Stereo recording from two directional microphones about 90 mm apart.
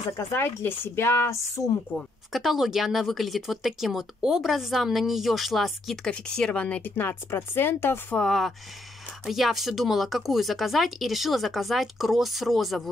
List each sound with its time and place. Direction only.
0.3 s speech: 25° left (ahead or behind)
2.3 s speech: 5° right (ahead or behind); by 8.2 s 25° left (ahead or behind)
8.2 s speech: centre (ahead or behind)